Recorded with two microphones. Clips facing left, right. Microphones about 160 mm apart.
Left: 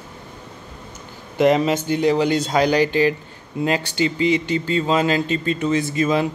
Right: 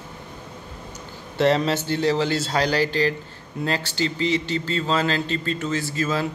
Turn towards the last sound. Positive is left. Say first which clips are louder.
# left 5 dB
turn(degrees=15)  # may be behind; listen again after turning